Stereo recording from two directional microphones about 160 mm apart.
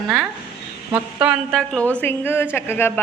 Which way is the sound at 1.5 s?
5° left (ahead or behind).